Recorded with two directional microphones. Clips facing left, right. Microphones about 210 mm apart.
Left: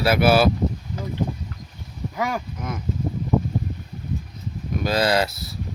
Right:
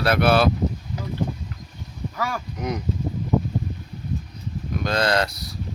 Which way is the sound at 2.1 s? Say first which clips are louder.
Left 3 dB; 15° left (ahead or behind).